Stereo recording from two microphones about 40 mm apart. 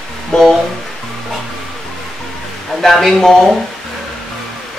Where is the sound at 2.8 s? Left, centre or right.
Centre.